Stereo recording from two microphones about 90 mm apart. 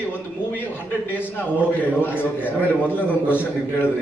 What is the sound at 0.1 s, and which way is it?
A man's voice, 20° left (ahead or behind).